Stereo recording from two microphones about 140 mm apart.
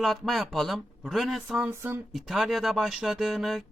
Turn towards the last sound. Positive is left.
turn(degrees=0)  # may be behind; listen again after turning